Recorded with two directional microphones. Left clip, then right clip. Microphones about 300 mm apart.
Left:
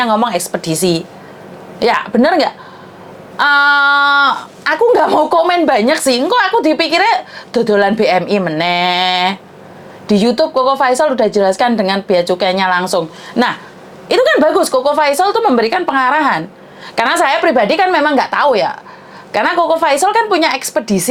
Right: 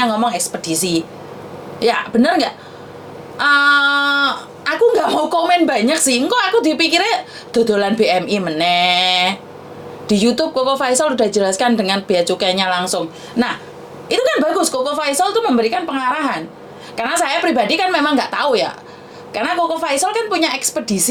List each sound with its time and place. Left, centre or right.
0.0 s a woman's voice: left
14.1 s a woman's voice: left
19.3 s a woman's voice: left